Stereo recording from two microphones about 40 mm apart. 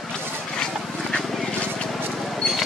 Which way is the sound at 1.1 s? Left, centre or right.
Left.